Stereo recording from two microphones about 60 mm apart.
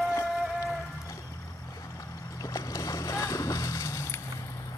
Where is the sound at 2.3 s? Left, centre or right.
Left.